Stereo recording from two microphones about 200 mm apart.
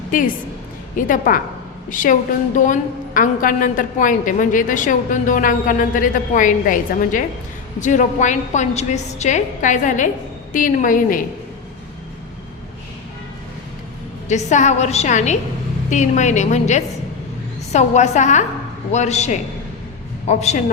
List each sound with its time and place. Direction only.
0.9 s a woman's voice: 40° left (ahead or behind)
3.2 s a woman's voice: 40° left (ahead or behind)
14.3 s a woman's voice: 35° left (ahead or behind)